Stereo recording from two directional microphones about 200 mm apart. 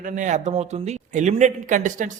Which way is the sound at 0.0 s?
40° right (ahead or behind).